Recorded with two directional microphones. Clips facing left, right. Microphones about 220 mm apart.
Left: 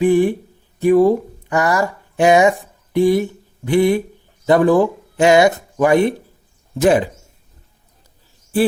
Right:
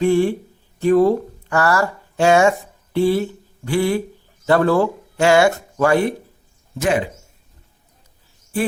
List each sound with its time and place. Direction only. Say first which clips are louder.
0.0 s speech: left 2 dB; 15° left (ahead or behind)
6.7 s speech: left 5 dB; 35° left (ahead or behind)